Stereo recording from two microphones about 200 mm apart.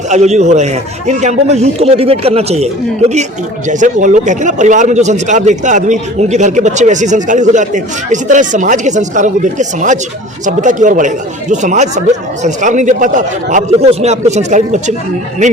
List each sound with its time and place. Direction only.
0.1 s speech: 35° right (ahead or behind)
3.7 s speech: 40° right (ahead or behind)